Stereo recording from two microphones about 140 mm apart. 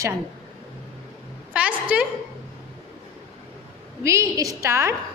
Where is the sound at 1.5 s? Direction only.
10° right (ahead or behind).